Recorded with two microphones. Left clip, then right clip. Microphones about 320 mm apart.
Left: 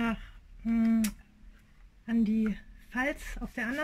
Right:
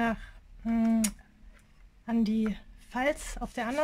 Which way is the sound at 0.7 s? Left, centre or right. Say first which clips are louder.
Even; right.